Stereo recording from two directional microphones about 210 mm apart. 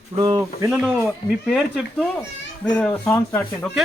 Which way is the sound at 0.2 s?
20° right (ahead or behind).